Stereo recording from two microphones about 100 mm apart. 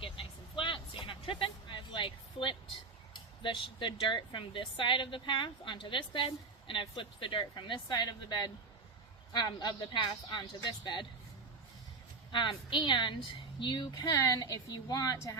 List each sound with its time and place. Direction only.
0.0 s vehicle: 60° left (ahead or behind)
3.4 s speech: 50° left (ahead or behind)
12.3 s speech: 50° left (ahead or behind)
14.1 s a woman's voice: 35° left (ahead or behind)